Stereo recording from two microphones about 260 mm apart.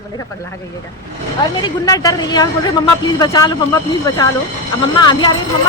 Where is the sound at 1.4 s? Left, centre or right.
Centre.